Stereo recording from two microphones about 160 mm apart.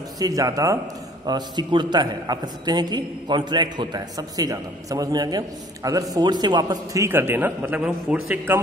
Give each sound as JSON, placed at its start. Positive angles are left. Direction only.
{"t": 0.2, "sound": "a man's voice", "side_deg": -20}